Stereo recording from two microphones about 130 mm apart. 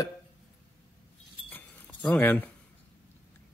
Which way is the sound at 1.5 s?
10° left (ahead or behind).